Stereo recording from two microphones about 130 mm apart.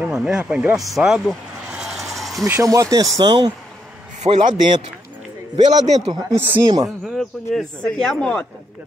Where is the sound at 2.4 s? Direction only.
20° right (ahead or behind).